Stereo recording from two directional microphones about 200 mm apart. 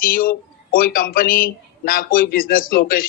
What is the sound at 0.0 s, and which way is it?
Speech, 45° left (ahead or behind).